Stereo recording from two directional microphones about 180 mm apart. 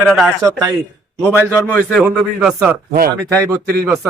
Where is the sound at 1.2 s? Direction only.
10° right (ahead or behind).